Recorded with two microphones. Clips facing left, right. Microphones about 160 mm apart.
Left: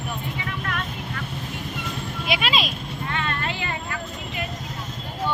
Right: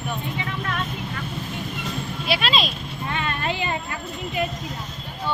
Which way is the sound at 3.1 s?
15° right (ahead or behind).